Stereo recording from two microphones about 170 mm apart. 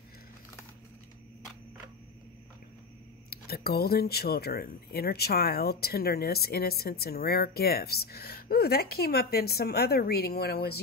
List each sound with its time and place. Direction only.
3.3 s speech: 65° left (ahead or behind)